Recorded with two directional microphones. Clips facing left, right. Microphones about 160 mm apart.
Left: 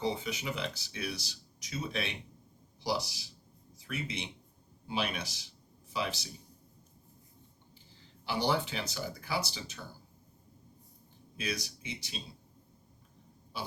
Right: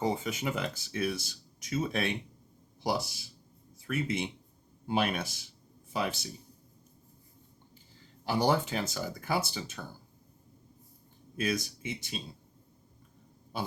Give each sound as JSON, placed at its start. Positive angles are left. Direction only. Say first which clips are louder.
{"t": 0.0, "sound": "speech", "louder": "right 3 dB", "side_deg": -50}
{"t": 8.2, "sound": "speech", "louder": "right 4 dB", "side_deg": -45}
{"t": 11.3, "sound": "speech", "louder": "right 6 dB", "side_deg": -50}